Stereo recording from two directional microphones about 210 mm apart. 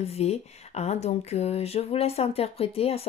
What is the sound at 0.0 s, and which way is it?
Speech, 30° left (ahead or behind).